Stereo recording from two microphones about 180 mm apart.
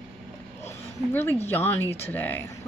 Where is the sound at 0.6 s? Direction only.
10° left (ahead or behind).